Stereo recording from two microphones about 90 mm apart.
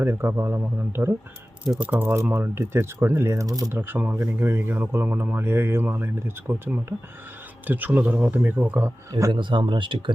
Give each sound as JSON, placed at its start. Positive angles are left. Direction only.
{"t": 0.0, "sound": "speech", "side_deg": -25}
{"t": 1.6, "sound": "speech", "side_deg": -10}
{"t": 1.9, "sound": "speech", "side_deg": -25}
{"t": 3.7, "sound": "speech", "side_deg": -25}
{"t": 9.3, "sound": "speech", "side_deg": -65}